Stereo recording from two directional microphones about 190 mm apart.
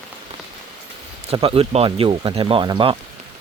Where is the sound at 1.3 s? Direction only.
30° right (ahead or behind).